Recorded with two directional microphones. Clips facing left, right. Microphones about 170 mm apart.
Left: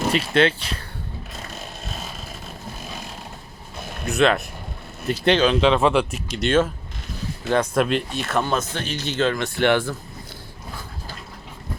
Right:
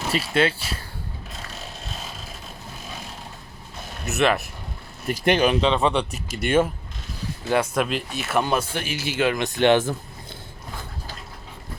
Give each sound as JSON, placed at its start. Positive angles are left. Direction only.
{"t": 0.1, "sound": "speech", "side_deg": -5}
{"t": 4.0, "sound": "speech", "side_deg": -5}
{"t": 5.5, "sound": "speech", "side_deg": 0}